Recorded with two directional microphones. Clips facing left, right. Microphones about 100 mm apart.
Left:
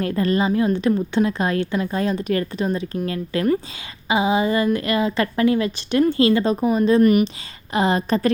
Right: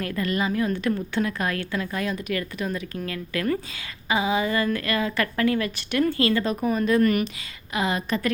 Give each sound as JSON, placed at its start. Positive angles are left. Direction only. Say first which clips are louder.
{"t": 0.0, "sound": "a woman's voice", "louder": "left 6 dB", "side_deg": 30}
{"t": 7.7, "sound": "a woman's voice", "louder": "left 6 dB", "side_deg": 35}